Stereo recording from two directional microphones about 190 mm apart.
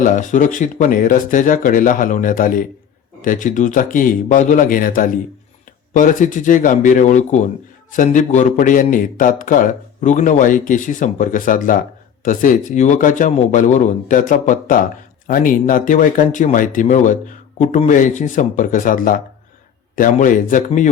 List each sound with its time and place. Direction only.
0.0 s a man's voice: 40° left (ahead or behind)